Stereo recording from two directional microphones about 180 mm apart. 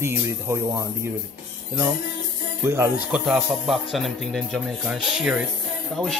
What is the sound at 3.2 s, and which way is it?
Speech, centre (ahead or behind).